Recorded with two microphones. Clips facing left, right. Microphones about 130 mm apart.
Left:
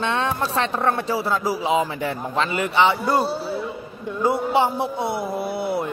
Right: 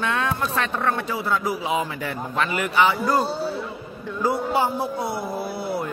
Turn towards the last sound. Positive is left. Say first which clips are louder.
# left 3 dB
turn(degrees=25)  # may be behind; listen again after turning